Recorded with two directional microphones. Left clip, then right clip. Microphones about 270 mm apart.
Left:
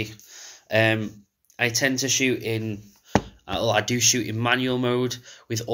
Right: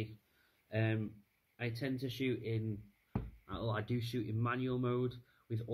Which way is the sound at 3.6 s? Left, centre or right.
Centre.